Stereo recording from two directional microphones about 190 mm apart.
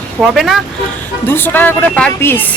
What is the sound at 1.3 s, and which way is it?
Speech, 10° left (ahead or behind).